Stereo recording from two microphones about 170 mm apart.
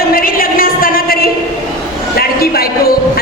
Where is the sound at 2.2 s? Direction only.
60° left (ahead or behind).